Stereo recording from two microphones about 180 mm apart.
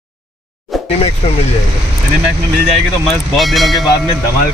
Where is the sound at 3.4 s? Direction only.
Centre (ahead or behind).